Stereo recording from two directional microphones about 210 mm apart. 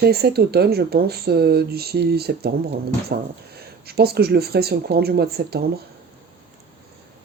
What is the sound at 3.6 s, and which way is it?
Speech, 50° right (ahead or behind).